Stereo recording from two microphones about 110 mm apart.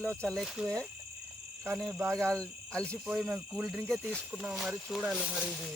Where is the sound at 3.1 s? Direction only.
Centre (ahead or behind).